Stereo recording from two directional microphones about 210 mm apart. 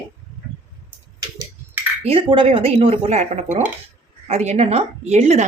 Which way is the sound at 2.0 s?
25° right (ahead or behind).